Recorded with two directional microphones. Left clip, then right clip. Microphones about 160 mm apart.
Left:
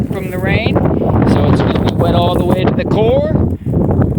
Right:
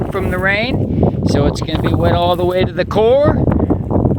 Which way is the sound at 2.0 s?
50° right (ahead or behind).